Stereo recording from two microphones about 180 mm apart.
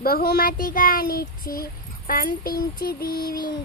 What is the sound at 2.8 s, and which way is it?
Child singing, 55° left (ahead or behind).